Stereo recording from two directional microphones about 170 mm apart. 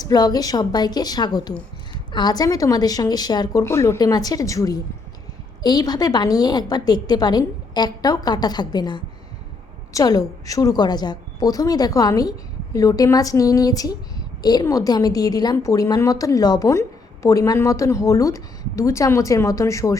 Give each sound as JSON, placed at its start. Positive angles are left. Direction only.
{"t": 0.0, "sound": "a woman's voice", "side_deg": 25}